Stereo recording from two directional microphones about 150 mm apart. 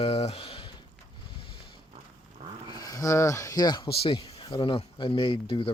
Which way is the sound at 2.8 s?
25° left (ahead or behind).